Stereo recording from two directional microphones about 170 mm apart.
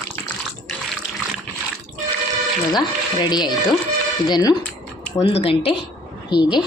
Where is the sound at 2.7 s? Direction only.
25° left (ahead or behind).